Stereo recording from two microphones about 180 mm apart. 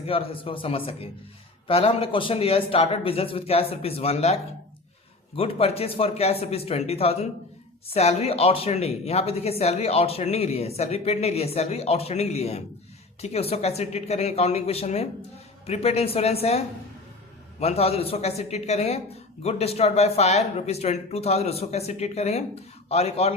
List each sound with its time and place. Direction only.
0.1 s speech: 30° left (ahead or behind)
5.4 s speech: 35° left (ahead or behind)